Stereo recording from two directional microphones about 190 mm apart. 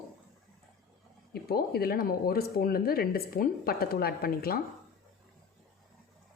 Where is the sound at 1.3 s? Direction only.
55° left (ahead or behind).